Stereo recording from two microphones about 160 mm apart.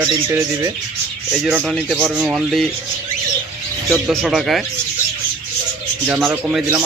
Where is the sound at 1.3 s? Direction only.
5° right (ahead or behind).